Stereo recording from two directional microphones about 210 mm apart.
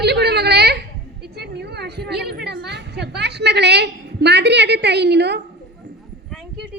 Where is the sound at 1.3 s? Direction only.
50° right (ahead or behind).